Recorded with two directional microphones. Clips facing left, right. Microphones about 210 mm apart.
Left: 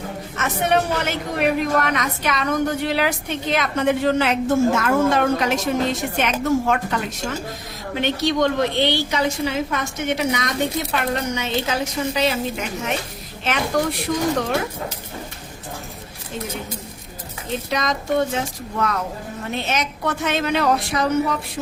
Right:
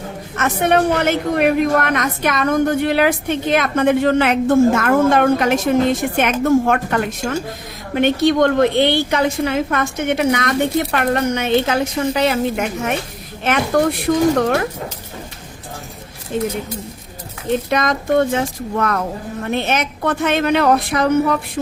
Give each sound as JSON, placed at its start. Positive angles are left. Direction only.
{"t": 0.3, "sound": "a woman's voice", "side_deg": -55}
{"t": 16.3, "sound": "a woman's voice", "side_deg": -60}
{"t": 17.5, "sound": "a woman's voice", "side_deg": -55}